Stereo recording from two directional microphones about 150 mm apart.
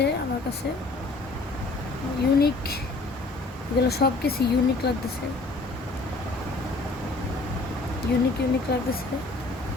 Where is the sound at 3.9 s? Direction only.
90° left.